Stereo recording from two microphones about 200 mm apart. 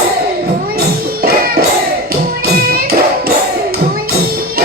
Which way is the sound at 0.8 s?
50° right (ahead or behind).